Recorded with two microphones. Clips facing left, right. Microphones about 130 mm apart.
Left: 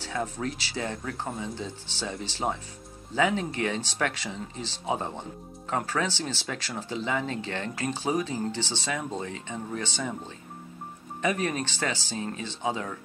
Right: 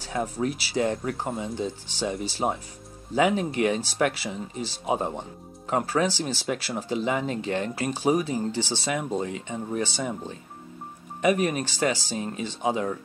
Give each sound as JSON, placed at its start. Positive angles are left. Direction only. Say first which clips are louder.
{"t": 0.0, "sound": "speech", "louder": "right 4 dB", "side_deg": -15}